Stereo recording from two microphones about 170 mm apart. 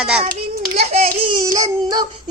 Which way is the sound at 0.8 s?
40° right (ahead or behind).